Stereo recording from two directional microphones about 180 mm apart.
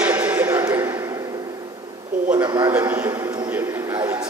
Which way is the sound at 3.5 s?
10° right (ahead or behind).